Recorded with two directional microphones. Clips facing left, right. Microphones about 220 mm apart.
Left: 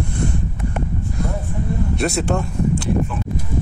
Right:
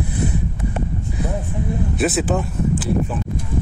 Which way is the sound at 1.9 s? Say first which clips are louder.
Right 2 dB; centre (ahead or behind).